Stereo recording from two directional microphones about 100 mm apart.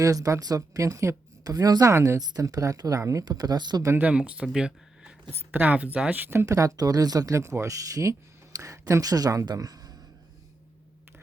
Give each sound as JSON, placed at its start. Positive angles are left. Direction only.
{"t": 0.0, "sound": "speech", "side_deg": -35}
{"t": 4.0, "sound": "speech", "side_deg": -10}
{"t": 5.3, "sound": "speech", "side_deg": -20}
{"t": 6.4, "sound": "speech", "side_deg": -35}